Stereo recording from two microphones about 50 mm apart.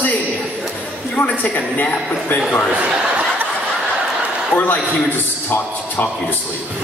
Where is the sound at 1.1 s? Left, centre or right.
Left.